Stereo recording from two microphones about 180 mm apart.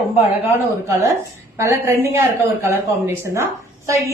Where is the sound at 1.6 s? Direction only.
15° right (ahead or behind).